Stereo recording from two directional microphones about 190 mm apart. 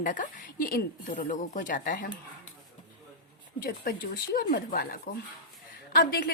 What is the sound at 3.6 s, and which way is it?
A woman's voice, 50° left (ahead or behind).